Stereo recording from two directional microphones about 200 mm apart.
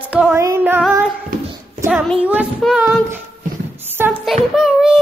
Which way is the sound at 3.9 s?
10° right (ahead or behind).